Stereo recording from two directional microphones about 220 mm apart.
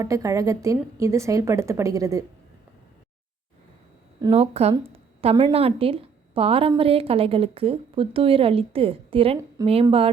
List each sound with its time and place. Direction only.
0.0 s a woman's voice: 15° right (ahead or behind)
4.2 s a woman's voice: 25° right (ahead or behind)